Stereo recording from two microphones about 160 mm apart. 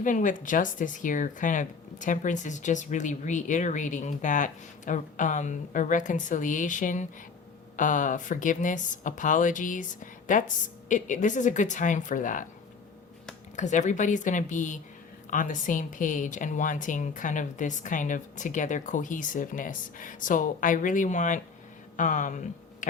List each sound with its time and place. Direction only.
0.0 s speech: 55° left (ahead or behind)
13.6 s a woman's voice: 50° left (ahead or behind)